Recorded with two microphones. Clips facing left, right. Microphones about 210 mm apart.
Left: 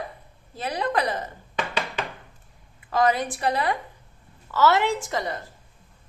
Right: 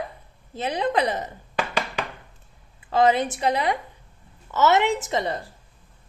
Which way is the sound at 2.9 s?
25° right (ahead or behind).